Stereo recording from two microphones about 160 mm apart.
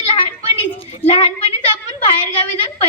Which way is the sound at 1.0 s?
35° left (ahead or behind).